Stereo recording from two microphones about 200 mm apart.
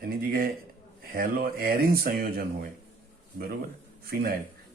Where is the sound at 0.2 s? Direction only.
45° right (ahead or behind).